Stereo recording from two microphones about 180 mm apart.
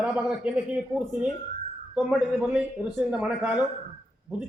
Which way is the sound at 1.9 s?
10° right (ahead or behind).